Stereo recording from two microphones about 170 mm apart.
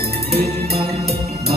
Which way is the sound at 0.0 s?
70° right (ahead or behind).